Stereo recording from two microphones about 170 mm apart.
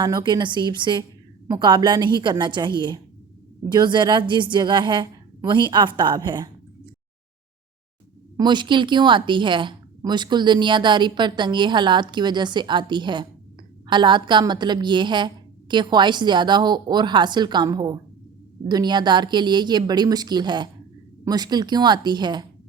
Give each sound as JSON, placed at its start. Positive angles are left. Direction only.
{"t": 0.0, "sound": "a woman's voice", "side_deg": -25}
{"t": 8.4, "sound": "a woman's voice", "side_deg": -25}